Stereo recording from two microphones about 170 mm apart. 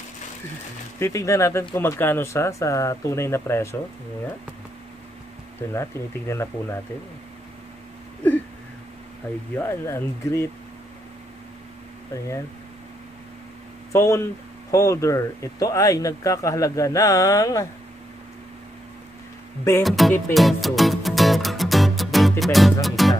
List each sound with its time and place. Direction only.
0.9 s speech: 15° left (ahead or behind)
5.6 s speech: 15° left (ahead or behind)
9.6 s speech: 15° left (ahead or behind)
13.9 s speech: 15° left (ahead or behind)
19.8 s music: centre (ahead or behind)